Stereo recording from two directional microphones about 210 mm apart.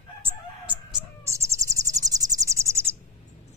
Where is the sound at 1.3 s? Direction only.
15° right (ahead or behind).